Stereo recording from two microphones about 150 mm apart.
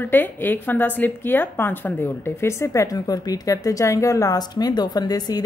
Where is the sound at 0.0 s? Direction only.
15° left (ahead or behind).